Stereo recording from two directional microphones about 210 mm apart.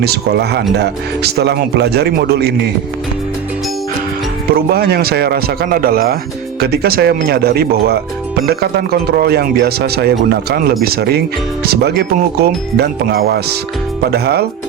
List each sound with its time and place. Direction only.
0.0 s speech: 50° right (ahead or behind)
4.5 s speech: 50° right (ahead or behind)